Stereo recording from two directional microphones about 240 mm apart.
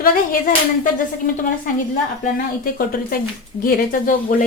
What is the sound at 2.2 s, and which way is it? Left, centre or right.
Speech, left.